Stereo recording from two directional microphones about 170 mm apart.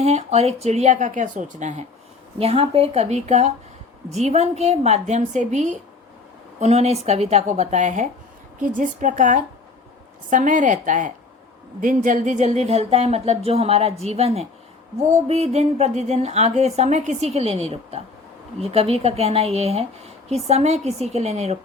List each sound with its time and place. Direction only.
0.0 s a woman's voice: 40° right (ahead or behind)